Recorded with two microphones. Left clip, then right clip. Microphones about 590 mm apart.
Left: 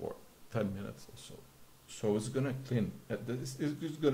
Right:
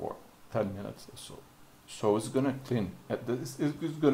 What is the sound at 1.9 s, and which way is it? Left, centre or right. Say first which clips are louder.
Speech: right 6 dB; right.